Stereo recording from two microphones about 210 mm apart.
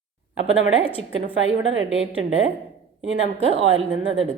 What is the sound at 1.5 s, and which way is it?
Speech, 65° right (ahead or behind).